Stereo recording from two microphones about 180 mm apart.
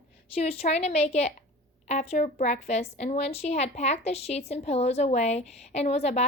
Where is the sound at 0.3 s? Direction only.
35° left (ahead or behind).